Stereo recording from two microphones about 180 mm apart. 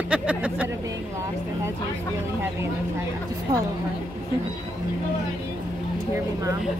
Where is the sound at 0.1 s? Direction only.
5° right (ahead or behind).